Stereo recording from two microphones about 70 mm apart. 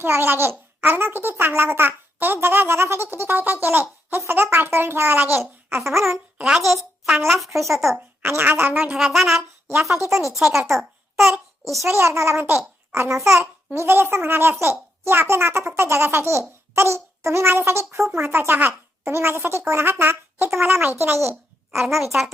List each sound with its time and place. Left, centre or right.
0.0 s a woman's voice: right
7.3 s speech: centre
7.9 s a woman's voice: right
8.9 s speech: centre
9.9 s speech: right
10.3 s a child's voice: centre
11.9 s a woman's voice: right
21.8 s speech: centre